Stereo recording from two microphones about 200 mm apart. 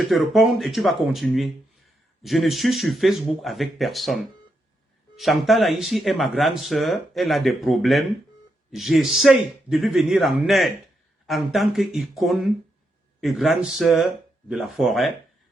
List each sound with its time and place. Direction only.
0.0 s speech: centre (ahead or behind)